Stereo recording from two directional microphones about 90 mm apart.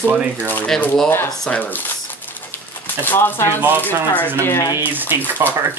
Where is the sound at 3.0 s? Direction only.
20° left (ahead or behind).